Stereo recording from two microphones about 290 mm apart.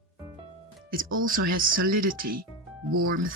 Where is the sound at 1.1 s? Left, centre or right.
Right.